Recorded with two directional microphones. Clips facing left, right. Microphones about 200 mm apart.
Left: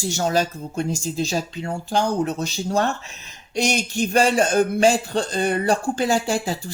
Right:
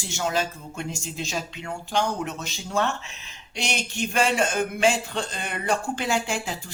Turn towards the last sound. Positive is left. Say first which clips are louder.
# left 5 dB
turn(degrees=35)  # may be behind; listen again after turning